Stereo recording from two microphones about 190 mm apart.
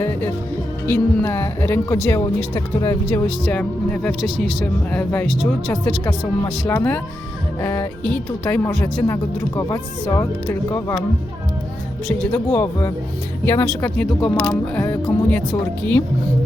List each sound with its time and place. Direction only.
0.9 s speech: 10° left (ahead or behind)
3.4 s speech: 5° left (ahead or behind)
12.3 s speech: 15° left (ahead or behind)